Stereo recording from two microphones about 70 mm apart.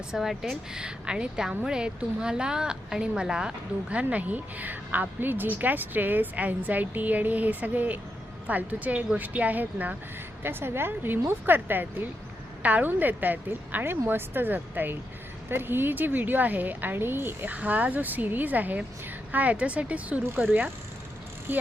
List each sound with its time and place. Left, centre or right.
0.1 s a woman's voice: centre
0.8 s a woman's voice: centre